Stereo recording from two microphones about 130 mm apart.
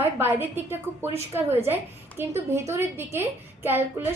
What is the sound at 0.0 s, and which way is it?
A woman's voice, 15° right (ahead or behind).